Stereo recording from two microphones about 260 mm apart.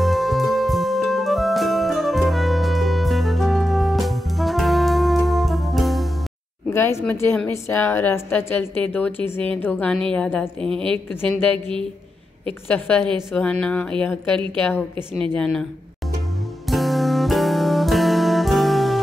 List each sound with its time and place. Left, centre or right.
0.0 s music: centre
6.7 s a woman's voice: centre
10.6 s a woman's voice: right
11.1 s a woman's voice: centre
12.6 s a woman's voice: centre
16.6 s music: centre